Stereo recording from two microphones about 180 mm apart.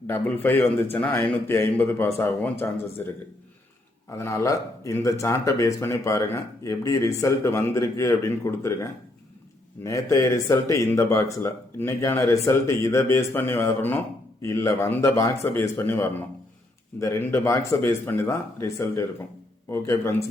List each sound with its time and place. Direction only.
0.1 s a man's voice: 10° left (ahead or behind)
4.1 s a man's voice: 15° left (ahead or behind)